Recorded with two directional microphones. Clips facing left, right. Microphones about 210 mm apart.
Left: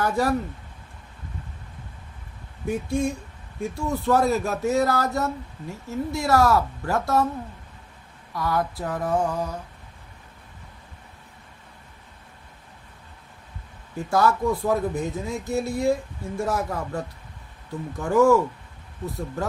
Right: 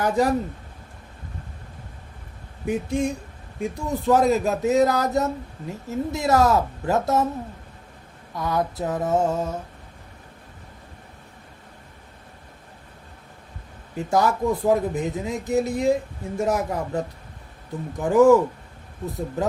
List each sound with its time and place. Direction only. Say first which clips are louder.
0.0 s speech: right 2 dB; 20° right (ahead or behind)
2.6 s speech: right 1 dB; 20° right (ahead or behind)
8.3 s speech: right 1 dB; 20° right (ahead or behind)
13.9 s speech: even; 20° right (ahead or behind)